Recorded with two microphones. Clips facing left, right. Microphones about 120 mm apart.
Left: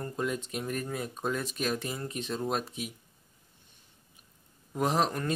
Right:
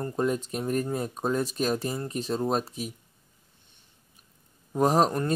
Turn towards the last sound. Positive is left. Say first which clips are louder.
# right 5 dB
turn(degrees=-40)  # may be behind; listen again after turning